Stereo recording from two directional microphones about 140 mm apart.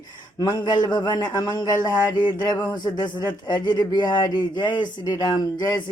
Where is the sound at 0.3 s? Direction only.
25° left (ahead or behind).